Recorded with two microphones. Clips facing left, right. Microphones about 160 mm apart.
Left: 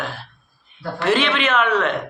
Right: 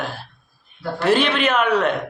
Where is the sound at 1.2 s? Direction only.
40° right (ahead or behind).